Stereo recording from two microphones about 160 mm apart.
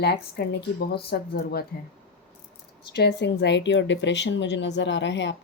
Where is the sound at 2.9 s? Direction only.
90° left.